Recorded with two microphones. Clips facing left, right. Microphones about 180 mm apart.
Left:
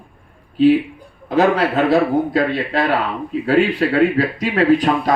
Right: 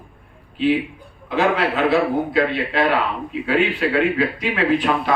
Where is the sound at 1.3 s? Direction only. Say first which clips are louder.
Left 4 dB; 40° left (ahead or behind).